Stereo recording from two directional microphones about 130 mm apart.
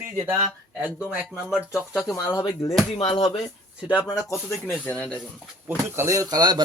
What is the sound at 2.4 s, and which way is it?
Speech, 40° left (ahead or behind).